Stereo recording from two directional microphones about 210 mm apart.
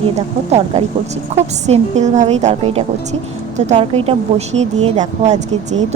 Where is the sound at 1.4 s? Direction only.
30° right (ahead or behind).